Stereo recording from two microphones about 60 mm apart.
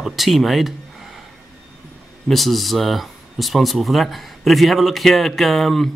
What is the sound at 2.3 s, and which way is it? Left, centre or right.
Speech, centre.